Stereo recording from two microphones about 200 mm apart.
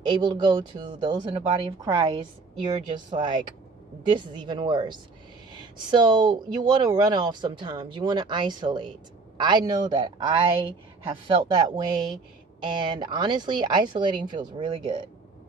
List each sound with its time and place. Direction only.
0.0 s speech: 20° right (ahead or behind)